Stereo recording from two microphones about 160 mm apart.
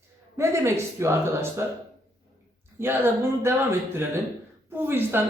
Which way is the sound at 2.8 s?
15° right (ahead or behind).